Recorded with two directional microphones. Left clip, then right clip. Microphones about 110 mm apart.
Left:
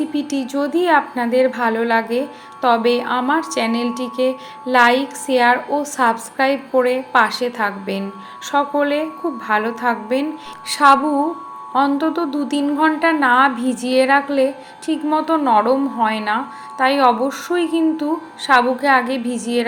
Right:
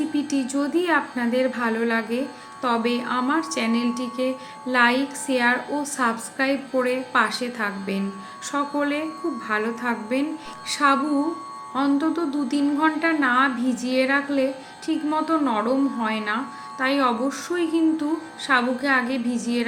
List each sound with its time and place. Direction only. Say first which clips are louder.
0.1 s a woman's voice: left 3 dB; 15° left (ahead or behind)
10.7 s music: left 8 dB; 20° left (ahead or behind)
11.7 s a woman's voice: left 6 dB; 15° left (ahead or behind)